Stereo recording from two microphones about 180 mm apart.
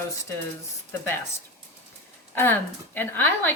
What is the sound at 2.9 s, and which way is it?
Speech, 10° left (ahead or behind).